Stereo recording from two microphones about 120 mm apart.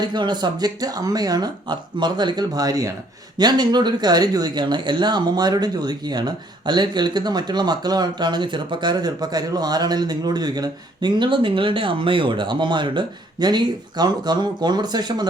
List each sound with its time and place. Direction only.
0.0 s speech: 40° right (ahead or behind)